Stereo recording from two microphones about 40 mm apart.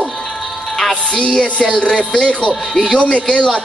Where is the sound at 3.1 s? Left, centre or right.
Left.